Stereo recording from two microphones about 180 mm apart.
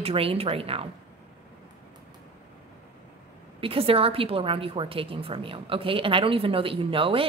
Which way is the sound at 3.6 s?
30° right (ahead or behind).